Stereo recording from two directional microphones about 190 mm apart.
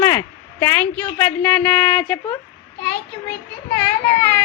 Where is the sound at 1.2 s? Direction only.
10° left (ahead or behind).